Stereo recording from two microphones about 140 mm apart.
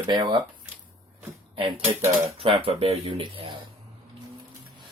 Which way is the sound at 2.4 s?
40° right (ahead or behind).